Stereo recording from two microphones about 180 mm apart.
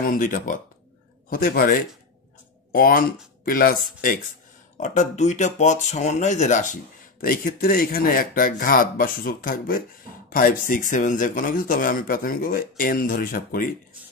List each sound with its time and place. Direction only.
0.0 s speech: 50° left (ahead or behind)
4.7 s speech: 40° left (ahead or behind)